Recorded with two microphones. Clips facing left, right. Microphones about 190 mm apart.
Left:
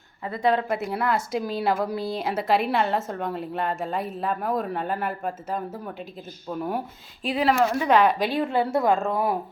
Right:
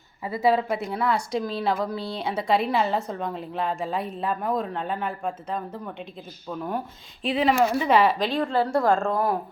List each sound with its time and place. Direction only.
0.3 s speech: 5° right (ahead or behind)